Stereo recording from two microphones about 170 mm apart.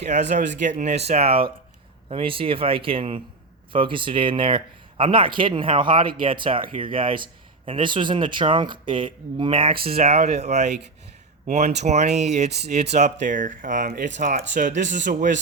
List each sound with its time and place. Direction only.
0.0 s speech: 40° right (ahead or behind)